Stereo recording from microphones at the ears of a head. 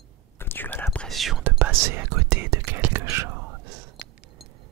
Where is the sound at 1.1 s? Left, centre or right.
Right.